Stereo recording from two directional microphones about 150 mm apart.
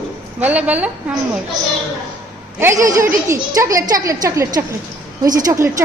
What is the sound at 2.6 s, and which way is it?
A child's voice, 20° right (ahead or behind).